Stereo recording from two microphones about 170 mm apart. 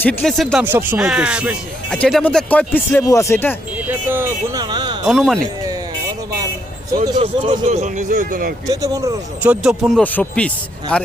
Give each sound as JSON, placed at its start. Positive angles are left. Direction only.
{"t": 0.0, "sound": "speech", "side_deg": 10}
{"t": 0.6, "sound": "speech", "side_deg": -10}
{"t": 3.8, "sound": "speech", "side_deg": -15}
{"t": 4.6, "sound": "a sound", "side_deg": -25}
{"t": 5.0, "sound": "speech", "side_deg": 0}
{"t": 7.2, "sound": "speech", "side_deg": -30}
{"t": 7.6, "sound": "speech", "side_deg": -40}
{"t": 8.6, "sound": "speech", "side_deg": -20}
{"t": 9.4, "sound": "speech", "side_deg": -5}
{"t": 10.0, "sound": "speech", "side_deg": 10}